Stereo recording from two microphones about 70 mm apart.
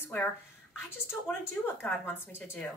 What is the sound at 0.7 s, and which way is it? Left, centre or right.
A woman's voice, left.